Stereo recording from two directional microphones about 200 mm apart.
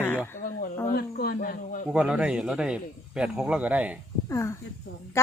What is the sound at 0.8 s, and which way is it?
Speech, 50° left (ahead or behind).